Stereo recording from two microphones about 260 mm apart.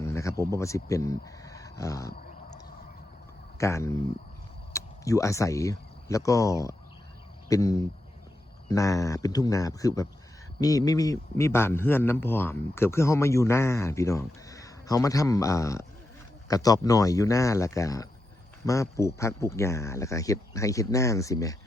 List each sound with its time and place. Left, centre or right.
0.0 s speech: centre
3.6 s a man's voice: centre